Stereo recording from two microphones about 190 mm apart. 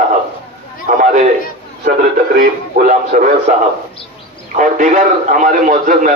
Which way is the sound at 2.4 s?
45° right (ahead or behind).